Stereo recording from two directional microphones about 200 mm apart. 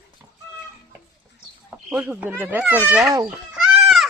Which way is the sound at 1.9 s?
10° right (ahead or behind).